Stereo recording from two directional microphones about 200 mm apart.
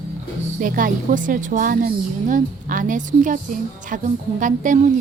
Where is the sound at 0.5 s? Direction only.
40° right (ahead or behind).